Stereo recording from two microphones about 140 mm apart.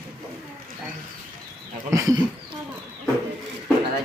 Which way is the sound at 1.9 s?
25° right (ahead or behind).